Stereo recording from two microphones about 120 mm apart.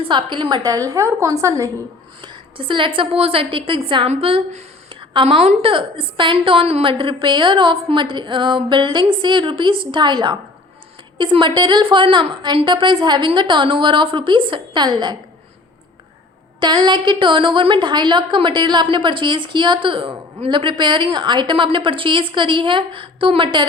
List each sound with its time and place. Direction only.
0.0 s a woman's voice: 40° right (ahead or behind); by 1.7 s 25° right (ahead or behind)
2.2 s a woman's voice: 40° right (ahead or behind)
16.6 s a woman's voice: 35° right (ahead or behind)